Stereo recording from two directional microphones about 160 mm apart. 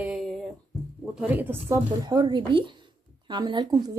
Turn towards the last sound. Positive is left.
turn(degrees=-25)  # may be behind; listen again after turning